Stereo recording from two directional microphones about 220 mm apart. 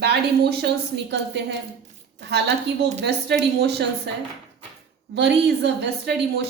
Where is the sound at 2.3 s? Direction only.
50° right (ahead or behind).